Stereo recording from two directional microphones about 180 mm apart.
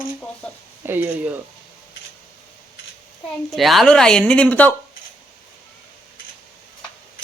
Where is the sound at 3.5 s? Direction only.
Centre (ahead or behind).